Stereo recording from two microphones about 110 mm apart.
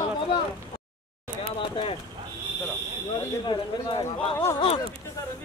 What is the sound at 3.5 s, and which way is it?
Speech, 40° left (ahead or behind).